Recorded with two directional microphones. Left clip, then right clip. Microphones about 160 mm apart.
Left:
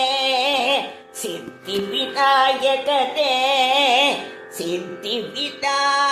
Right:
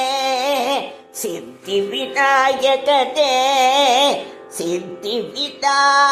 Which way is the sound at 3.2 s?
50° right (ahead or behind).